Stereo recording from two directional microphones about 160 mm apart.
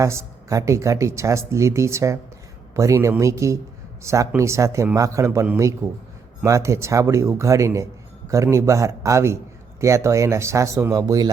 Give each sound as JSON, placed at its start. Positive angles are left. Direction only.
{"t": 0.0, "sound": "speech", "side_deg": -20}